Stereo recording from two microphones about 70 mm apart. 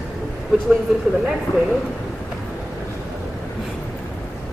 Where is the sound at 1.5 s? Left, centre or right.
Left.